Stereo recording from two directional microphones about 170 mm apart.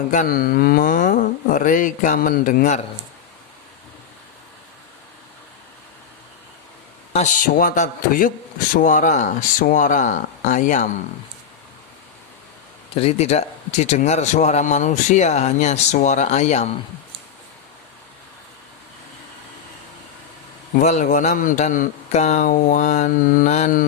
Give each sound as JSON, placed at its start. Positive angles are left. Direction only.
{"t": 0.1, "sound": "a man's voice", "side_deg": 50}
{"t": 7.1, "sound": "a man's voice", "side_deg": 50}
{"t": 12.9, "sound": "a man's voice", "side_deg": 35}
{"t": 20.7, "sound": "a man's voice", "side_deg": 45}